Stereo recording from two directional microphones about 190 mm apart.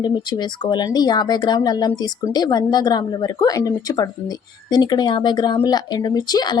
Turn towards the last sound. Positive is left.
turn(degrees=20)  # may be behind; listen again after turning